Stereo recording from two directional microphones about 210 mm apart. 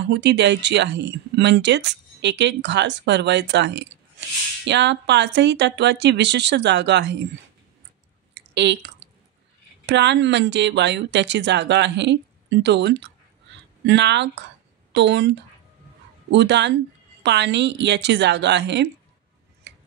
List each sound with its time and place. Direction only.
0.0 s speech: 55° right (ahead or behind)
8.4 s a sound: 55° right (ahead or behind)
9.8 s a woman's voice: 55° right (ahead or behind)
19.7 s tick-tock: 55° right (ahead or behind)